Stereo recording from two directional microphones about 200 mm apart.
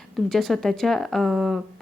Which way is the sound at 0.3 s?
Centre (ahead or behind).